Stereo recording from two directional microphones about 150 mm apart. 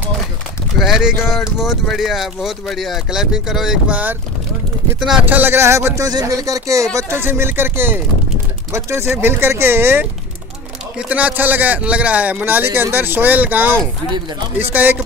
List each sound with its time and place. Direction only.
0.7 s speech: centre (ahead or behind)